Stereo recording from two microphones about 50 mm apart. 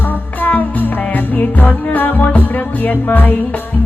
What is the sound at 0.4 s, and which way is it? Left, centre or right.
Music, left.